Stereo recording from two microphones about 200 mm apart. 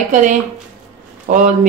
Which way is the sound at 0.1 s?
40° right (ahead or behind).